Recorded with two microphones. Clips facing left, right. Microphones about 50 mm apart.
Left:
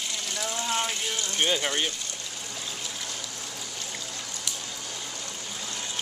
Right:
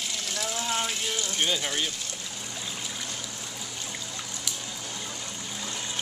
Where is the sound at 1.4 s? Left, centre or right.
Centre.